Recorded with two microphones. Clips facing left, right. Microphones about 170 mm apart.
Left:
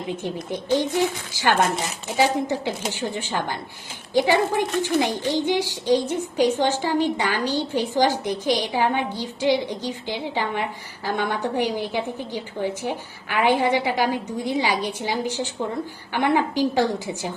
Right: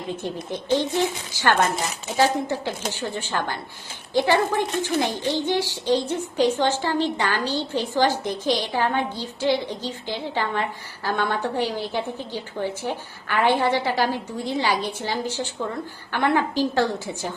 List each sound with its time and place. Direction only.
0.1 s a woman's voice: 15° left (ahead or behind)
1.6 s speech: centre (ahead or behind)
2.1 s a woman's voice: 15° left (ahead or behind)